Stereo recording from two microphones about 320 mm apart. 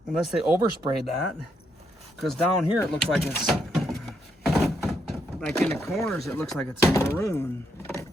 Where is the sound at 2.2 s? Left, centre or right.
Centre.